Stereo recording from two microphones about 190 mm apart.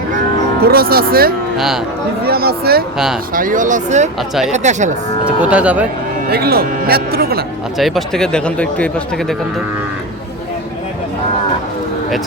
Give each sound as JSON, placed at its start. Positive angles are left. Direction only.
{"t": 0.6, "sound": "speech", "side_deg": -55}
{"t": 1.5, "sound": "speech", "side_deg": 0}
{"t": 2.2, "sound": "speech", "side_deg": -55}
{"t": 5.4, "sound": "speech", "side_deg": -5}
{"t": 6.3, "sound": "speech", "side_deg": -55}
{"t": 7.8, "sound": "speech", "side_deg": 0}